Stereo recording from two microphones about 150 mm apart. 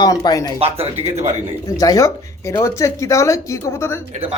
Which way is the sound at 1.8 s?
20° left (ahead or behind).